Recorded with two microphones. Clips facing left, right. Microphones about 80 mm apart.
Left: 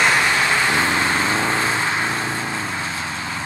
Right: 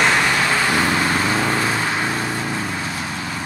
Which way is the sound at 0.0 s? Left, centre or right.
Left.